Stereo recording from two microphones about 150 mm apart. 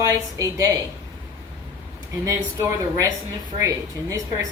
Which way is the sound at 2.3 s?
20° right (ahead or behind).